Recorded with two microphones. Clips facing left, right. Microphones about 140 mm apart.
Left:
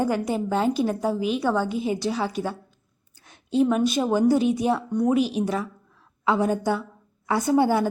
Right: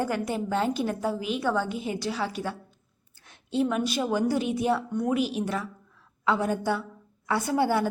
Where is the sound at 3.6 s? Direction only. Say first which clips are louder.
Left 5 dB; 30° left (ahead or behind).